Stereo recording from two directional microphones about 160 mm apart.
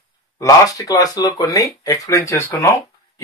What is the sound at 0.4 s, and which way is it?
Speech, 20° left (ahead or behind).